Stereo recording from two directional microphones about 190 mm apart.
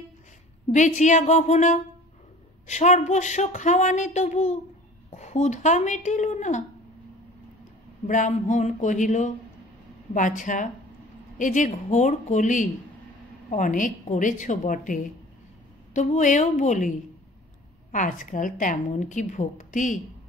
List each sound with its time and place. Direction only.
0.7 s speech: 40° left (ahead or behind)
8.1 s a woman's voice: 40° left (ahead or behind)
17.9 s a woman's voice: 45° left (ahead or behind)